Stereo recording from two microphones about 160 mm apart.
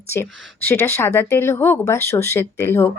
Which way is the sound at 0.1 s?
15° left (ahead or behind).